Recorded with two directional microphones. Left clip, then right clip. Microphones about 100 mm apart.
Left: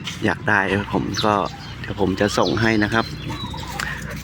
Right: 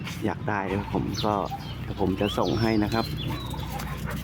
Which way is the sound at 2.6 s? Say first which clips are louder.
Left 7 dB; 20° left (ahead or behind).